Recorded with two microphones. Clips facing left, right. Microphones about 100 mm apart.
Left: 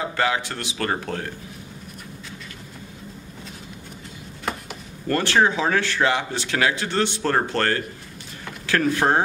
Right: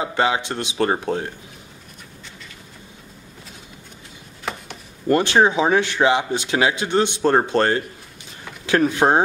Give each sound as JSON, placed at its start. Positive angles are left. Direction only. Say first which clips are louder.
{"t": 0.0, "sound": "speech", "louder": "right 3 dB", "side_deg": -20}
{"t": 5.0, "sound": "speech", "louder": "right 3 dB", "side_deg": -20}